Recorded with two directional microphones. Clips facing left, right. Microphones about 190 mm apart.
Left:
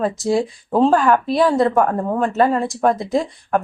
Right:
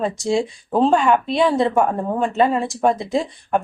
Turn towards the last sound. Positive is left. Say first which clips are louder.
# left 1 dB
turn(degrees=0)  # may be behind; listen again after turning